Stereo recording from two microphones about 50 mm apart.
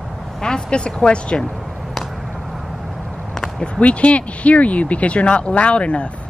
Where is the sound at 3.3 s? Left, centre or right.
Centre.